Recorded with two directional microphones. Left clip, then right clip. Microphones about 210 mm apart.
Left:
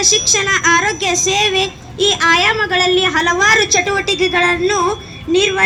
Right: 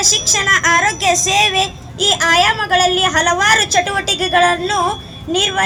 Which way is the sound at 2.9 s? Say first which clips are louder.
Even; 50° right (ahead or behind).